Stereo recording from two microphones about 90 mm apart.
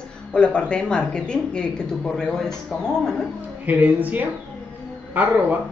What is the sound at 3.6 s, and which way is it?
A woman's voice, 20° right (ahead or behind).